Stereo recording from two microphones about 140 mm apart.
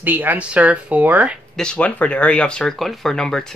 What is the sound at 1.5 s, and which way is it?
Speech, 5° left (ahead or behind).